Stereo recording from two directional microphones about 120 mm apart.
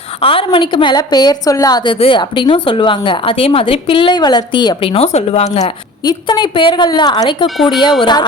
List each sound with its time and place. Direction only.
0.2 s a woman's voice: 50° left (ahead or behind)
4.9 s speech: 60° left (ahead or behind)
6.1 s a woman's voice: 40° left (ahead or behind)
7.4 s speech: centre (ahead or behind)
8.0 s a woman's voice: 40° left (ahead or behind)